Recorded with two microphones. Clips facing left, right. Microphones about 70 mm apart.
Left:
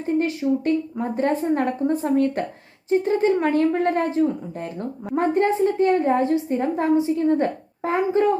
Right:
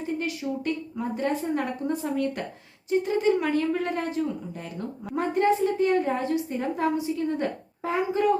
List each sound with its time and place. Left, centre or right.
0.1 s a woman's voice: left